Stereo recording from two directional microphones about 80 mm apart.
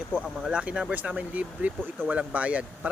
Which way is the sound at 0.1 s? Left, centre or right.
Centre.